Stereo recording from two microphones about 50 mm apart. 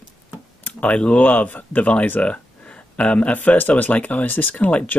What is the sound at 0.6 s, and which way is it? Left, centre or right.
Computer keyboard, left.